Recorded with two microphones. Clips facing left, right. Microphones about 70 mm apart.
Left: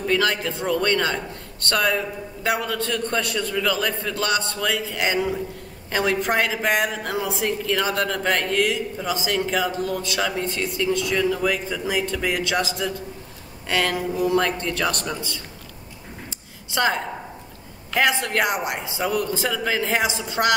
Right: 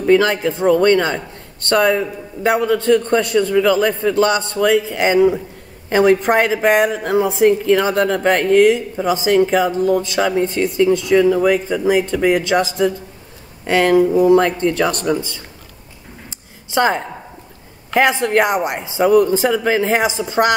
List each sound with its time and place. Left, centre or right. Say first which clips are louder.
0.0 s a woman's voice: right 8 dB; right
16.7 s a woman's voice: right 6 dB; right